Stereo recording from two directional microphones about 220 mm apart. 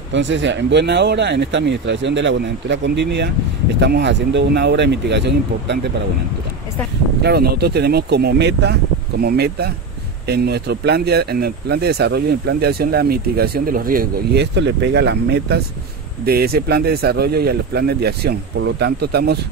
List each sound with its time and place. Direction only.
0.1 s speech: 55° right (ahead or behind)
7.2 s speech: 45° right (ahead or behind)